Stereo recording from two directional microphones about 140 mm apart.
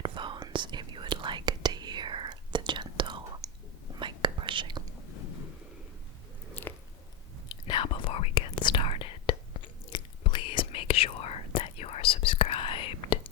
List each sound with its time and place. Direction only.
0.0 s whispering: 35° right (ahead or behind)
6.5 s biting: 15° left (ahead or behind)
7.5 s whispering: 35° left (ahead or behind)